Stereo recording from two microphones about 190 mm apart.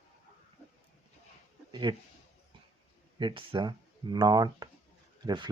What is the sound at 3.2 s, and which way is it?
Speech, 25° right (ahead or behind).